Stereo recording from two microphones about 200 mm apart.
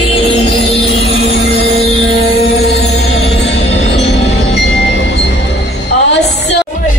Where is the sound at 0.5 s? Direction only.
60° left (ahead or behind).